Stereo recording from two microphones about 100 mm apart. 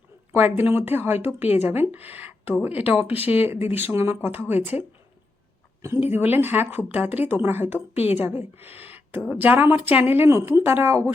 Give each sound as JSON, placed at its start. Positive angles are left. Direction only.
{"t": 0.3, "sound": "speech", "side_deg": -20}
{"t": 6.0, "sound": "speech", "side_deg": -20}
{"t": 8.6, "sound": "a sound", "side_deg": -20}
{"t": 9.4, "sound": "speech", "side_deg": -20}